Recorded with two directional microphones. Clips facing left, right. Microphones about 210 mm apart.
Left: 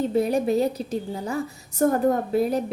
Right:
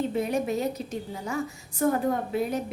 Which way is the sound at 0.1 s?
35° left (ahead or behind).